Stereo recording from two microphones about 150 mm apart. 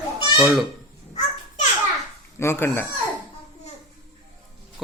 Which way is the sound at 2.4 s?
15° left (ahead or behind).